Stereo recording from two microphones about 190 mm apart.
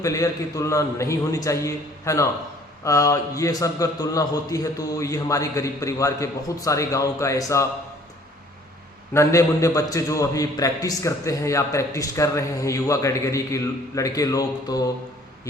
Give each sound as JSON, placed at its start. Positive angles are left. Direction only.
{"t": 0.0, "sound": "a man's voice", "side_deg": 15}
{"t": 9.1, "sound": "a man's voice", "side_deg": 15}